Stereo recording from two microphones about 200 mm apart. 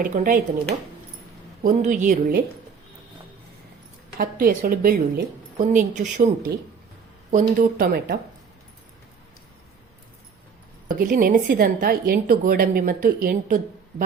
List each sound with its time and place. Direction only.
0.0 s a woman's voice: 40° right (ahead or behind)
1.6 s a woman's voice: 40° right (ahead or behind)
4.2 s a woman's voice: 45° right (ahead or behind)
10.8 s a woman's voice: 45° right (ahead or behind)